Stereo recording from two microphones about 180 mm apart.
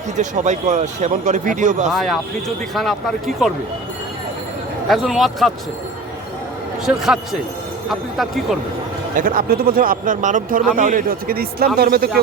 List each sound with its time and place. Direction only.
0.2 s speech: 40° right (ahead or behind)
1.9 s speech: centre (ahead or behind)
4.9 s speech: centre (ahead or behind)
6.8 s speech: 5° right (ahead or behind)
9.1 s speech: 50° right (ahead or behind)